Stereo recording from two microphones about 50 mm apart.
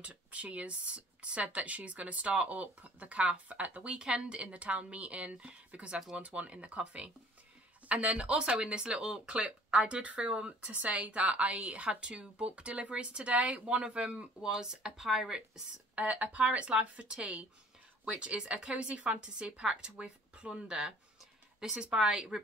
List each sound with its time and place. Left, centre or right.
0.0 s speech: right
14.4 s speech: centre
15.9 s speech: right